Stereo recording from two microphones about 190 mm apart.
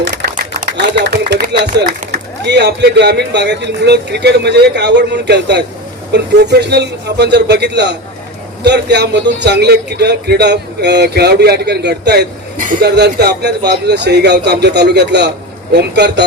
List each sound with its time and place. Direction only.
0.0 s a sound: 60° right (ahead or behind)
2.1 s a man's voice: 65° right (ahead or behind)
12.5 s chuckle: 45° right (ahead or behind)
12.8 s a man's voice: 60° right (ahead or behind)